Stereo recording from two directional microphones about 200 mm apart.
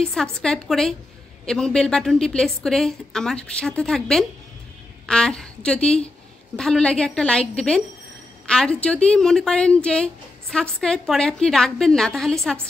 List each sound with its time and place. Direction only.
0.0 s a woman's voice: 5° left (ahead or behind)